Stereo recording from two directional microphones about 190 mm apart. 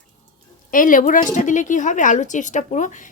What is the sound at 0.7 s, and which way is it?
Speech, 45° left (ahead or behind).